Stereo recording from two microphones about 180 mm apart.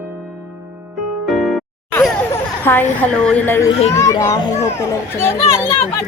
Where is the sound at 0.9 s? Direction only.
Centre (ahead or behind).